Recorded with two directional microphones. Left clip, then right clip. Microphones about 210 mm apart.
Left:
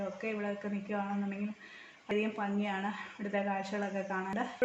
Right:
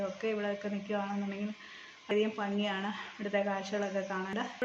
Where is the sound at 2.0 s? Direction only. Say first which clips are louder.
Right 2 dB; centre (ahead or behind).